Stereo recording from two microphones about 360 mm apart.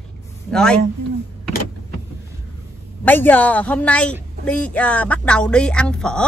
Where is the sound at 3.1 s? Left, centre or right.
Centre.